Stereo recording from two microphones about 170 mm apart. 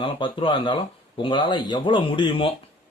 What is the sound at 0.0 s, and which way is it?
Speech, 30° left (ahead or behind).